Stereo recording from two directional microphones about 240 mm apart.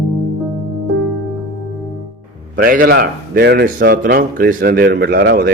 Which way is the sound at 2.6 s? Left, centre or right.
Right.